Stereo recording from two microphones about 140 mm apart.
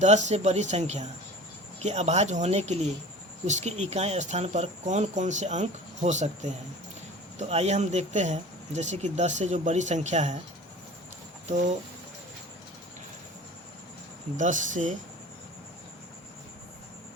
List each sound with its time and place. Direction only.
0.0 s speech: 55° right (ahead or behind)
11.4 s speech: 60° right (ahead or behind)
14.3 s speech: 65° right (ahead or behind)